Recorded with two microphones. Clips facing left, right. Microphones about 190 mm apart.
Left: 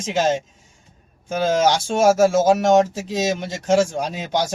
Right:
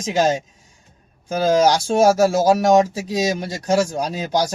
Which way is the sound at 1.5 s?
35° right (ahead or behind).